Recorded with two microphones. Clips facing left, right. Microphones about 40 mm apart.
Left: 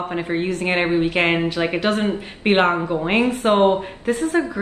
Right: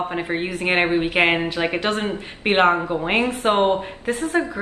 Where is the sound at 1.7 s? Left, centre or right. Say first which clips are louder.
Left 2 dB; centre.